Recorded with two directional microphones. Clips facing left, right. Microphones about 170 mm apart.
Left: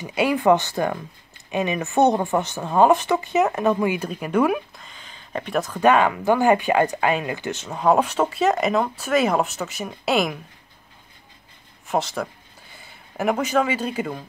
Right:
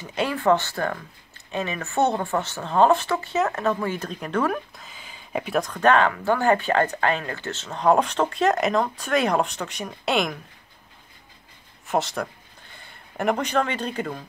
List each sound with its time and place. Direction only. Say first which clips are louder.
0.0 s speech: left 4 dB; 10° left (ahead or behind)
4.7 s a sound: even; 5° right (ahead or behind)
5.6 s speech: left 2 dB; 10° left (ahead or behind)
11.9 s speech: left 1 dB; centre (ahead or behind)